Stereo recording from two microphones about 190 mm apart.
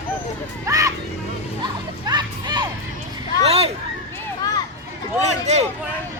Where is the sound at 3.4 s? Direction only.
30° right (ahead or behind).